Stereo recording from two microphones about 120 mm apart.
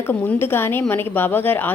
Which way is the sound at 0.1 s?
15° left (ahead or behind).